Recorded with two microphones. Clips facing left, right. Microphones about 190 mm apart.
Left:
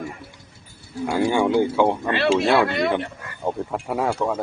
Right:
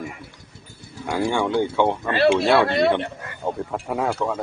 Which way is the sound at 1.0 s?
5° left (ahead or behind).